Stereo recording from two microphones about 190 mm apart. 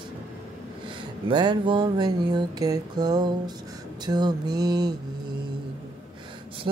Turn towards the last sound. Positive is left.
turn(degrees=-25)  # may be behind; listen again after turning